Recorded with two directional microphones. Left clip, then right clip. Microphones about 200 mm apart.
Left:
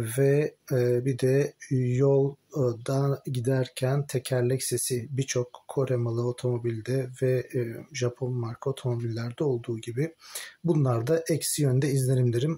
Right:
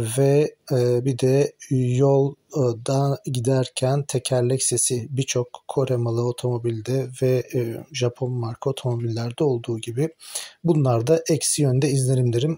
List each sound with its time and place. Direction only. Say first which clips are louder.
0.0 s speech: right 5 dB; 25° right (ahead or behind)